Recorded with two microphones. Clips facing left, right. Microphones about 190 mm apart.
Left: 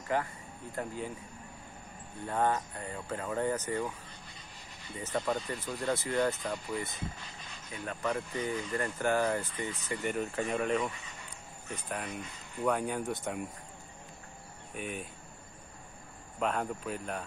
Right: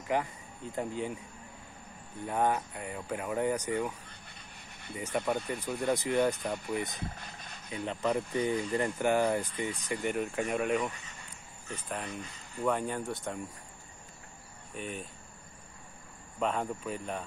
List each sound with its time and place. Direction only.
0.1 s speech: 15° right (ahead or behind)
2.2 s speech: 15° right (ahead or behind)
4.9 s speech: 10° right (ahead or behind)
12.6 s speech: 5° left (ahead or behind)
14.8 s speech: 5° left (ahead or behind)
16.3 s speech: centre (ahead or behind)